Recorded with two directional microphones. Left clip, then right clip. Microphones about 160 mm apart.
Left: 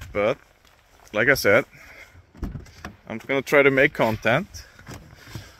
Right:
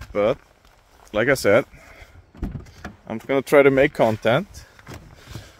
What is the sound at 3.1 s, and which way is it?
Speech, 30° right (ahead or behind).